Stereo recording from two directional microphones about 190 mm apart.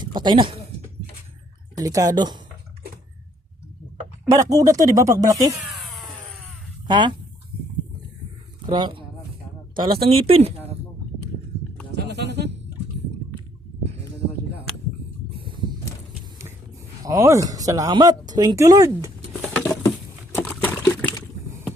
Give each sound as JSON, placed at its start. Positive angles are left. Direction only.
{"t": 0.0, "sound": "speech", "side_deg": -25}
{"t": 1.7, "sound": "speech", "side_deg": -20}
{"t": 4.3, "sound": "speech", "side_deg": -20}
{"t": 5.5, "sound": "a sound", "side_deg": 0}
{"t": 6.8, "sound": "speech", "side_deg": -25}
{"t": 8.7, "sound": "speech", "side_deg": -25}
{"t": 10.1, "sound": "speech", "side_deg": -30}
{"t": 11.9, "sound": "music", "side_deg": -60}
{"t": 15.4, "sound": "a sound", "side_deg": -25}
{"t": 17.0, "sound": "speech", "side_deg": -15}
{"t": 19.5, "sound": "patter", "side_deg": 10}
{"t": 20.3, "sound": "pour", "side_deg": 10}